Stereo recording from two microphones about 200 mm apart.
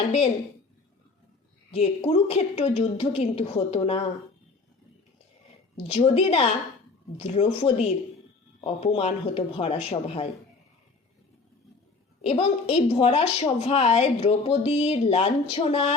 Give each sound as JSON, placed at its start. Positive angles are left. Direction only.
{"t": 1.7, "sound": "a woman's voice", "side_deg": 30}
{"t": 5.9, "sound": "a woman's voice", "side_deg": 30}
{"t": 12.2, "sound": "a woman's voice", "side_deg": 30}